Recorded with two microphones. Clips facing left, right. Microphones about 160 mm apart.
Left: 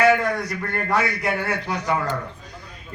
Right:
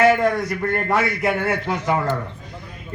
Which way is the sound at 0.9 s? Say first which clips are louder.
Even; 25° right (ahead or behind).